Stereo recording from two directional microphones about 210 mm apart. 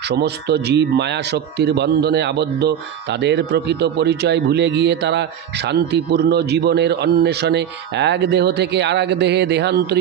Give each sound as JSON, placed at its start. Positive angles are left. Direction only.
{"t": 0.1, "sound": "a man's voice", "side_deg": -50}